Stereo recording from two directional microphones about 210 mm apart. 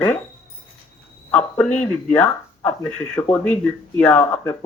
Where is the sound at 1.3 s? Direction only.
5° left (ahead or behind).